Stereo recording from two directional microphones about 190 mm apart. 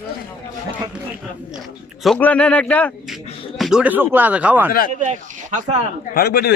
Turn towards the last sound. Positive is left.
turn(degrees=55)  # may be behind; listen again after turning